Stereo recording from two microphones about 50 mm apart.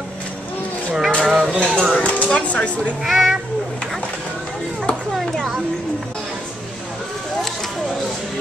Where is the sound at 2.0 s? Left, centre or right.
Left.